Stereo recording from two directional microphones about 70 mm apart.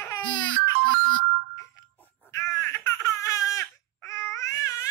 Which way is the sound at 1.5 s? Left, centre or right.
Left.